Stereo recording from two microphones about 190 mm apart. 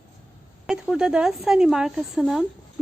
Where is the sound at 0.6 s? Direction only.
5° right (ahead or behind).